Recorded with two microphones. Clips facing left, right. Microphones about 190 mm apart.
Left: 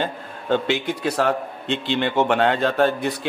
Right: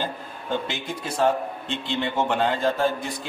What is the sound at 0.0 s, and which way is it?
A man's voice, 65° left (ahead or behind).